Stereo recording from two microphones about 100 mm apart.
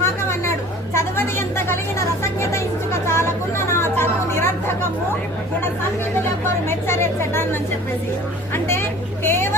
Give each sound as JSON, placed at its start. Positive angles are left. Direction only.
{"t": 0.0, "sound": "chatter", "side_deg": 25}
{"t": 0.9, "sound": "a sound", "side_deg": 25}
{"t": 6.7, "sound": "a woman's voice", "side_deg": 25}
{"t": 8.5, "sound": "vehicle", "side_deg": 25}